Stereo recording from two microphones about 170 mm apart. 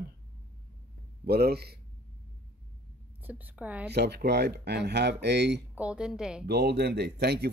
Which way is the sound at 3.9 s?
75° right (ahead or behind).